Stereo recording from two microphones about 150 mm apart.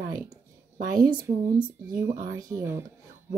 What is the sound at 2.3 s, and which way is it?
Speech, 20° right (ahead or behind).